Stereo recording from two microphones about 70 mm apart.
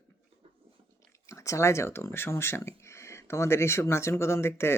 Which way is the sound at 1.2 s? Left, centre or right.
Left.